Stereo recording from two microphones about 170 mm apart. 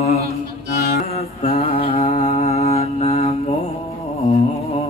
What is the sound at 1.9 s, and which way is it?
Mantra, 40° left (ahead or behind).